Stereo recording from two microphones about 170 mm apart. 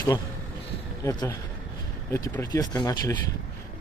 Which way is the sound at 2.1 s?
15° left (ahead or behind).